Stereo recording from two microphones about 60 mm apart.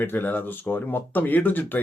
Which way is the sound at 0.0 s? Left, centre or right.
Left.